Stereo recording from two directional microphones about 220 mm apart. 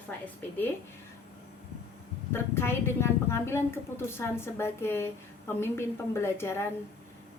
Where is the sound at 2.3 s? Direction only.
10° left (ahead or behind).